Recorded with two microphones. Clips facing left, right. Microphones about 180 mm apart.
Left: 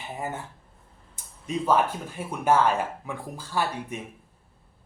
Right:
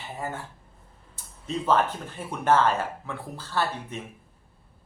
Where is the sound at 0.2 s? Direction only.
20° left (ahead or behind).